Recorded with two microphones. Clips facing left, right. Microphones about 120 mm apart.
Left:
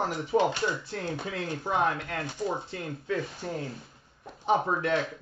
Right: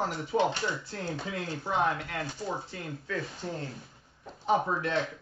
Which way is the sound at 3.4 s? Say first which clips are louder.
Left 2 dB; 10° left (ahead or behind).